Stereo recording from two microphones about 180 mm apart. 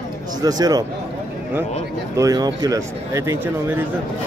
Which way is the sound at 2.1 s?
20° right (ahead or behind).